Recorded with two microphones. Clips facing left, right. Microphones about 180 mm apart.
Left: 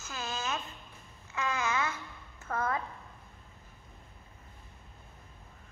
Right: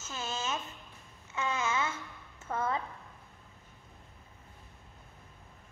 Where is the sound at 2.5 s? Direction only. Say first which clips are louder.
Even; 25° right (ahead or behind).